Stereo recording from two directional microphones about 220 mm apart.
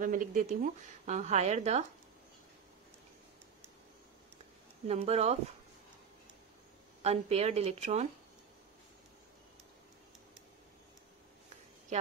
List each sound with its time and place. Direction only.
0.0 s speech: 40° right (ahead or behind)
4.8 s a woman's voice: 30° right (ahead or behind)
7.0 s a woman's voice: 30° right (ahead or behind)